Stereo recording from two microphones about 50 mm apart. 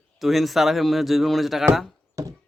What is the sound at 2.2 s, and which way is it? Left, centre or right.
Horse, right.